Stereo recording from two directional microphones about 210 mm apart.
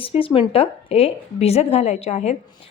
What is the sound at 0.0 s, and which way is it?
A woman's voice, 25° left (ahead or behind).